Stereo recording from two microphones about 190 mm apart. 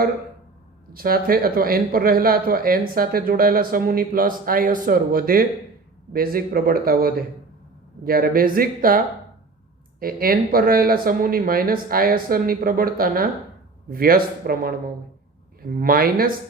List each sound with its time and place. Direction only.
0.9 s speech: 50° right (ahead or behind)
15.7 s speech: 50° right (ahead or behind)